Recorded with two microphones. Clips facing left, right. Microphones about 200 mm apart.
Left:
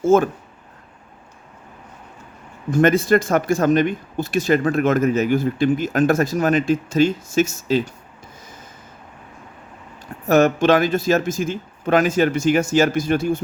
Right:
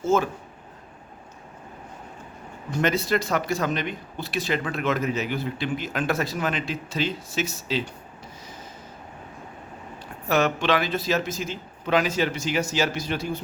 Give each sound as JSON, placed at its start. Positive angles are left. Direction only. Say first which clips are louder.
{"t": 0.0, "sound": "speech", "louder": "left 7 dB", "side_deg": 50}
{"t": 2.6, "sound": "speech", "louder": "left 8 dB", "side_deg": 50}
{"t": 10.2, "sound": "speech", "louder": "left 8 dB", "side_deg": 45}